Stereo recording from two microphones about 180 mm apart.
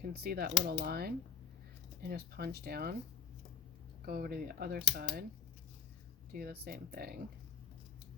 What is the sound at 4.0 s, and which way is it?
Speech, 60° right (ahead or behind).